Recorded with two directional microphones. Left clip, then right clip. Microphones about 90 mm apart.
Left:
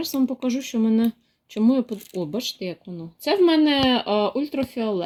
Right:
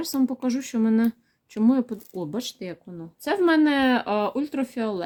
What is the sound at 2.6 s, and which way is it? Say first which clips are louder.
Speech: left 4 dB; 10° left (ahead or behind).